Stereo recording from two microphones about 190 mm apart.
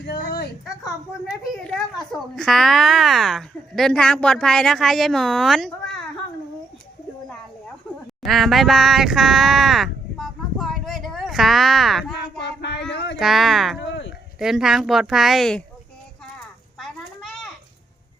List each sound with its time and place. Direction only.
0.0 s a sound: 55° left (ahead or behind)
1.3 s a child's voice: centre (ahead or behind)
8.2 s speech: centre (ahead or behind)
12.4 s child singing: 65° left (ahead or behind)
12.9 s speech: 65° left (ahead or behind)
13.1 s a child's voice: centre (ahead or behind)
13.7 s a sound: 70° left (ahead or behind)
14.3 s a child's voice: 5° right (ahead or behind)
16.7 s children playing: centre (ahead or behind)